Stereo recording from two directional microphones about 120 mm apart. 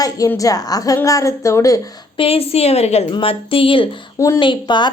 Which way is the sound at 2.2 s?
55° left (ahead or behind).